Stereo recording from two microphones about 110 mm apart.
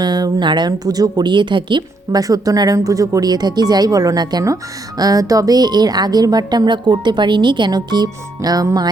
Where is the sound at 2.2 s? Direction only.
35° right (ahead or behind).